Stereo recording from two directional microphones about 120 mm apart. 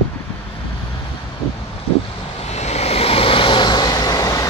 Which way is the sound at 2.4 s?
65° left (ahead or behind).